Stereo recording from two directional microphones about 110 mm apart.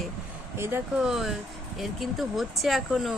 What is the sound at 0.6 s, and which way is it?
Speech, 20° right (ahead or behind).